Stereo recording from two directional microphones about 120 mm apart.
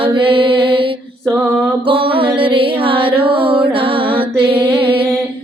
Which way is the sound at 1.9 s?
45° right (ahead or behind).